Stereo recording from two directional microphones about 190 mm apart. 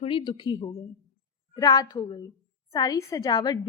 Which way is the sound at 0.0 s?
25° left (ahead or behind).